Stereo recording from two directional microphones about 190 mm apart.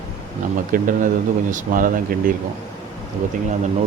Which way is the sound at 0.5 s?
45° right (ahead or behind).